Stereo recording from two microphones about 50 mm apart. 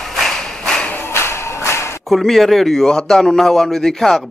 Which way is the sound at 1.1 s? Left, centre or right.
Left.